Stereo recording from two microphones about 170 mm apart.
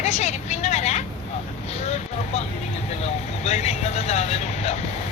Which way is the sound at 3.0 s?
40° left (ahead or behind).